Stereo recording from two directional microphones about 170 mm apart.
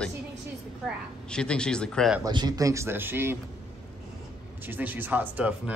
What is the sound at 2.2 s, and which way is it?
Speech, 25° right (ahead or behind).